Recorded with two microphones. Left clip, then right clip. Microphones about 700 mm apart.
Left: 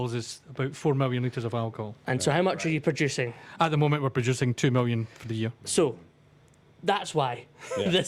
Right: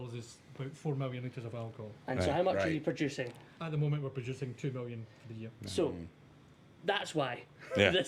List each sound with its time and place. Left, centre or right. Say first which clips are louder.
0.0 s speech: left 14 dB; left
3.6 s speech: left 14 dB; left
5.6 s speech: left 8 dB; left
6.8 s a man's voice: left 7 dB; left